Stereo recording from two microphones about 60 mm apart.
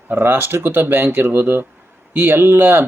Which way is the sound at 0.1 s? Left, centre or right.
Right.